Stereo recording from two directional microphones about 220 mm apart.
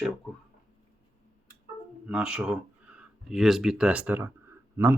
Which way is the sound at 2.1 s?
5° right (ahead or behind).